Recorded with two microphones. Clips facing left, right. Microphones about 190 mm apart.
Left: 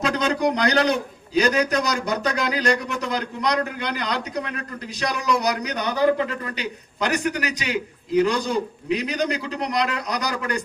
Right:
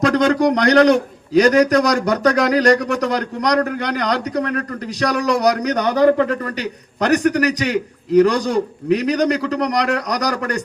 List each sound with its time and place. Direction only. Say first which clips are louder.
0.0 s a man's voice: right 7 dB; 65° right (ahead or behind)